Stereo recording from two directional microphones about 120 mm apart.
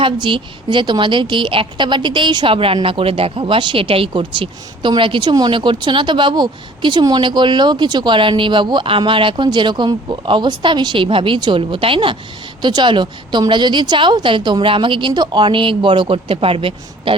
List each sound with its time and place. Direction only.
0.0 s speech: 45° right (ahead or behind)